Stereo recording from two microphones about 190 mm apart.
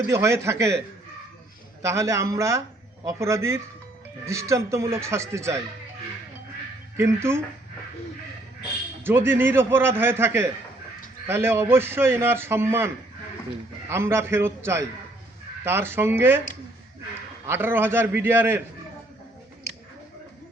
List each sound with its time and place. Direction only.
0.1 s a man's voice: 15° right (ahead or behind)
1.8 s a man's voice: 15° right (ahead or behind)
6.9 s a man's voice: 15° right (ahead or behind)
9.0 s a man's voice: 10° right (ahead or behind)
13.9 s a man's voice: 15° right (ahead or behind)
17.4 s a man's voice: 10° right (ahead or behind)